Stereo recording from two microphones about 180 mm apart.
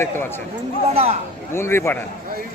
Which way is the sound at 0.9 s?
35° right (ahead or behind).